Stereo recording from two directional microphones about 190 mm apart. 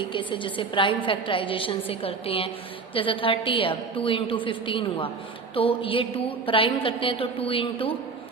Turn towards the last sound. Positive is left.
turn(degrees=30)  # may be behind; listen again after turning